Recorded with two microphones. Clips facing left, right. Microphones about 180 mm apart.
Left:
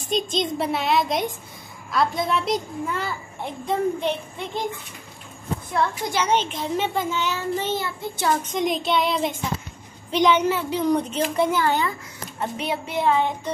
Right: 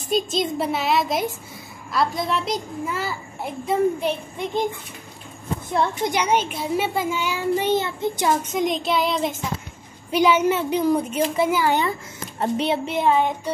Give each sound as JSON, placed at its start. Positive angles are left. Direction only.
{"t": 0.1, "sound": "a child's voice", "side_deg": -5}
{"t": 5.7, "sound": "a child's voice", "side_deg": -20}
{"t": 12.4, "sound": "speech", "side_deg": -30}